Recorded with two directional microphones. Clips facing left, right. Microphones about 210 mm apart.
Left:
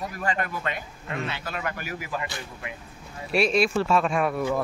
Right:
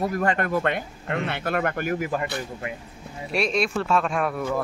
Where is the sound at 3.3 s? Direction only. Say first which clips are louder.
Left 2 dB; 5° left (ahead or behind).